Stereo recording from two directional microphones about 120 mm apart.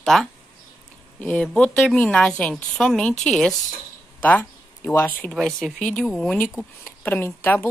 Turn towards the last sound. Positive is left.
turn(degrees=15)  # may be behind; listen again after turning